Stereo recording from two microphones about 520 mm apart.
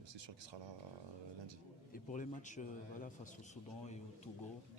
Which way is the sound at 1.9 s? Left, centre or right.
Centre.